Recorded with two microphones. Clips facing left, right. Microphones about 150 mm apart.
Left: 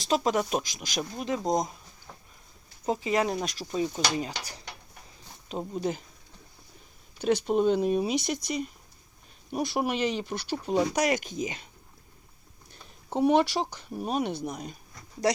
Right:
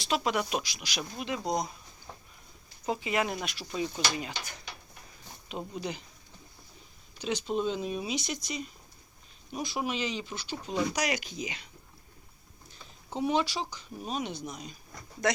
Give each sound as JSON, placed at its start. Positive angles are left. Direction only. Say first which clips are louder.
{"t": 0.0, "sound": "speech", "louder": "left 4 dB", "side_deg": 40}
{"t": 2.8, "sound": "speech", "louder": "left 4 dB", "side_deg": 35}
{"t": 7.2, "sound": "speech", "louder": "left 6 dB", "side_deg": 60}
{"t": 10.9, "sound": "speech", "louder": "left 5 dB", "side_deg": 50}
{"t": 13.1, "sound": "speech", "louder": "left 6 dB", "side_deg": 60}
{"t": 15.2, "sound": "speech", "louder": "left 3 dB", "side_deg": 35}